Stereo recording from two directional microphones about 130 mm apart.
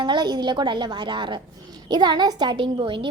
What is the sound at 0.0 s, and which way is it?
A woman's voice, 35° right (ahead or behind).